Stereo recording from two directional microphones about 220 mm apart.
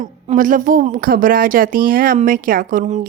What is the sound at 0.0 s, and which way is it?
A woman's voice, 35° right (ahead or behind).